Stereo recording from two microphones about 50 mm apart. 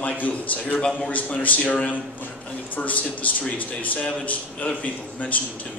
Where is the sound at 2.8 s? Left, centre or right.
Left.